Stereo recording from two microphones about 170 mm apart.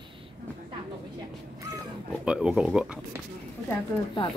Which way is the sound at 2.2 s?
5° right (ahead or behind).